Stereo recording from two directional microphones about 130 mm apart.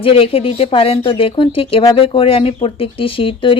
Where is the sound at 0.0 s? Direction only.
45° left (ahead or behind).